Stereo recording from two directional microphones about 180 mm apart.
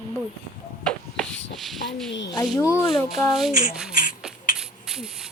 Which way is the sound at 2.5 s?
20° left (ahead or behind).